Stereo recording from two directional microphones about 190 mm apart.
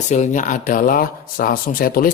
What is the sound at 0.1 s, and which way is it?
Speech, 40° left (ahead or behind).